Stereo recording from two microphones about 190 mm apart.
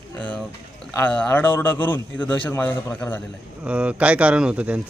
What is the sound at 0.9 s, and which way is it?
A man's voice, 5° left (ahead or behind).